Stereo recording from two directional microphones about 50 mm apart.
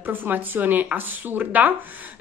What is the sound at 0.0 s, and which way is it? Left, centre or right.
A woman's voice, right.